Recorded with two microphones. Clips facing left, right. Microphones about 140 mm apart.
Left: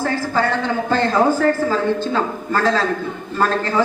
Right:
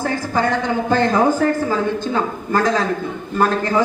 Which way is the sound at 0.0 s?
15° right (ahead or behind).